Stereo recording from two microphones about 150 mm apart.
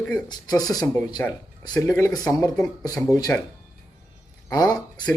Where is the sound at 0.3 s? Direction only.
25° left (ahead or behind).